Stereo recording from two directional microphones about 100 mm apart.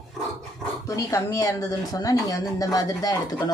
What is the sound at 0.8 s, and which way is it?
Speech, 30° left (ahead or behind).